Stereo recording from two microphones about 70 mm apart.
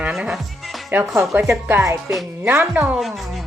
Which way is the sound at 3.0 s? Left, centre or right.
Centre.